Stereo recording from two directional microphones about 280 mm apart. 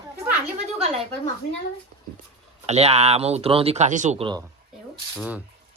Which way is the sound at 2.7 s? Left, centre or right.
Right.